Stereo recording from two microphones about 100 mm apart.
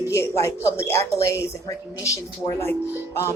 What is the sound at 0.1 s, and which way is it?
A woman's voice, 30° left (ahead or behind).